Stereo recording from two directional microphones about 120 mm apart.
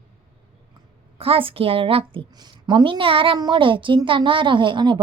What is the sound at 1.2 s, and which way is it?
A woman's voice, 50° right (ahead or behind).